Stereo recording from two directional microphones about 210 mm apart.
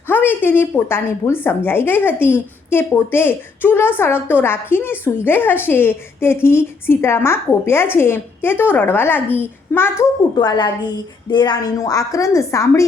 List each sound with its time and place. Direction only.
0.1 s a woman's voice: 10° left (ahead or behind)